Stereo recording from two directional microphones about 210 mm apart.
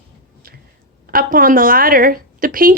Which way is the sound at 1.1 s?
40° right (ahead or behind).